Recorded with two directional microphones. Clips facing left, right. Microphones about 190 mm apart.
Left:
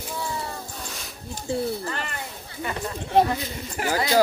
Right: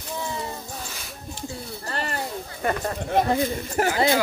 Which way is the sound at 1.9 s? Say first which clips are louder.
Right 3 dB; 35° right (ahead or behind).